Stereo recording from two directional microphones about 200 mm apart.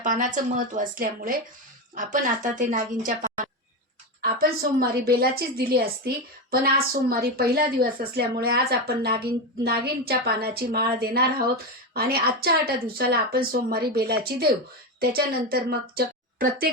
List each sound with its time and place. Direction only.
0.0 s a woman's voice: 40° right (ahead or behind)
4.2 s a woman's voice: 50° right (ahead or behind)